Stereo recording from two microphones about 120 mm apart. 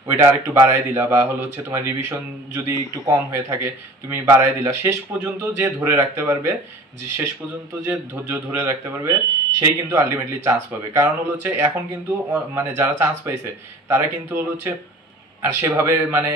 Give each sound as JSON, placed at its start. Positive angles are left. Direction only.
{"t": 0.1, "sound": "speech", "side_deg": -20}
{"t": 7.9, "sound": "speech", "side_deg": -15}